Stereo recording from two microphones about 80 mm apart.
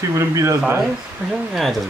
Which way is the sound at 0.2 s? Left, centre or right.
Right.